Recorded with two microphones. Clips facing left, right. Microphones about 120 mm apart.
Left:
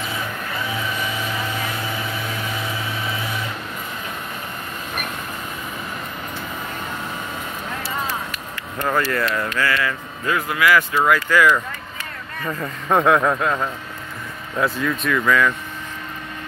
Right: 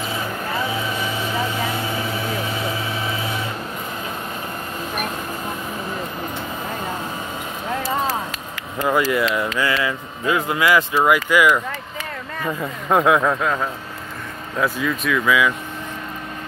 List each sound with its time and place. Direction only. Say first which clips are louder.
8.7 s speech: right 3 dB; 10° right (ahead or behind)